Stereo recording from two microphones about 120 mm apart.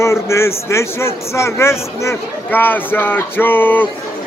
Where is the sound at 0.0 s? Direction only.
20° left (ahead or behind).